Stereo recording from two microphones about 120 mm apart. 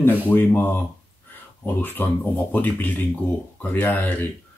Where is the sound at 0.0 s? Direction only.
20° left (ahead or behind).